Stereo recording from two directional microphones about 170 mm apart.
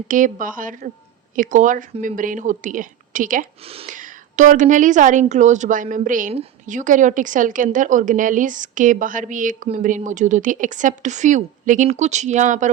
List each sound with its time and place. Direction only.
0.1 s a woman's voice: 50° right (ahead or behind)